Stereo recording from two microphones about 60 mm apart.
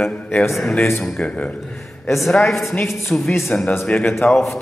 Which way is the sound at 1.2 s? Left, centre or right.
Centre.